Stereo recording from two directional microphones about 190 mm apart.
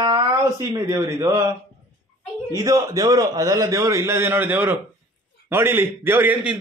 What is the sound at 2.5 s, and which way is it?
A man's voice, 15° right (ahead or behind).